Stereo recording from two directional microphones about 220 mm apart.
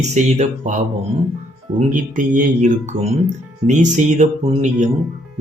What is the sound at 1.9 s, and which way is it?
Speech, 35° right (ahead or behind).